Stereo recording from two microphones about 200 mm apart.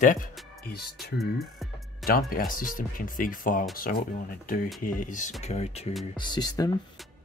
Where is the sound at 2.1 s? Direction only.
50° left (ahead or behind); by 6.7 s 20° left (ahead or behind).